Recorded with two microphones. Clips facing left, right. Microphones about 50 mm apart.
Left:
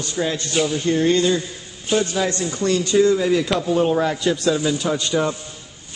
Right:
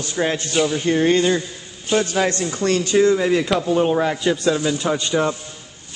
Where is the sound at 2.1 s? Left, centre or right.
Right.